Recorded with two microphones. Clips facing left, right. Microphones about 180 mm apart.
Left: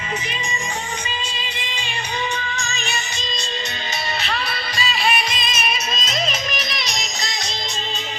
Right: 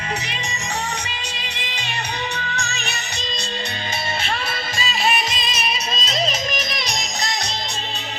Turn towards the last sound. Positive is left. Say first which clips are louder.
# right 2 dB
turn(degrees=-55)  # may be behind; listen again after turning